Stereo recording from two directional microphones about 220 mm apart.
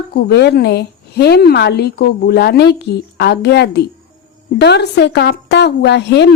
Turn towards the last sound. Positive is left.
turn(degrees=50)  # may be behind; listen again after turning